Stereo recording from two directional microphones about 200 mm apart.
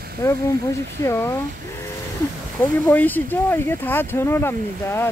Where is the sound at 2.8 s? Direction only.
10° left (ahead or behind).